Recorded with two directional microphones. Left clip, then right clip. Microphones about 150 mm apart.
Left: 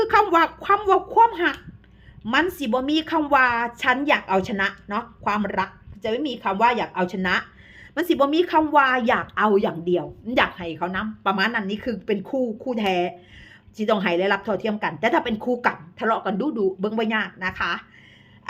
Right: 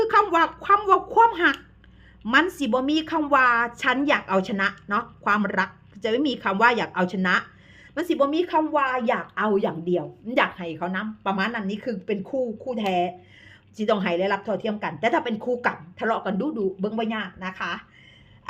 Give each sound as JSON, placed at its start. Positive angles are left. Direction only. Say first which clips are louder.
{"t": 0.0, "sound": "a woman's voice", "louder": "left 2 dB", "side_deg": 10}
{"t": 7.9, "sound": "a woman's voice", "louder": "left 3 dB", "side_deg": 10}
{"t": 13.7, "sound": "a woman's voice", "louder": "left 2 dB", "side_deg": 5}